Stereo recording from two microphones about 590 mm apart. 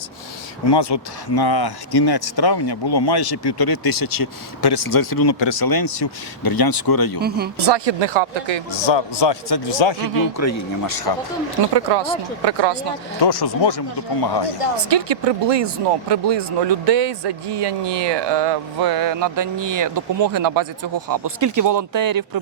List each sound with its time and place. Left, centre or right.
0.6 s speech: left
7.2 s speech: centre
7.7 s speech: right
8.7 s a man's voice: left
10.3 s speech: left
11.7 s speech: right
13.2 s speech: left
14.8 s speech: right